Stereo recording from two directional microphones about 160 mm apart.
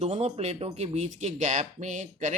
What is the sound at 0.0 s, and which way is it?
Speech, 40° right (ahead or behind).